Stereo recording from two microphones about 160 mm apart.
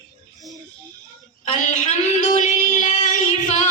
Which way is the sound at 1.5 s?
50° left (ahead or behind).